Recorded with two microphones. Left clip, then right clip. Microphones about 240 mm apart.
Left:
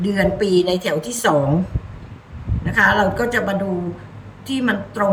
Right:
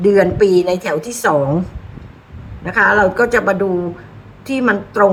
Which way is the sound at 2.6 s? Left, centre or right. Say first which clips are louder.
Right 3 dB; right.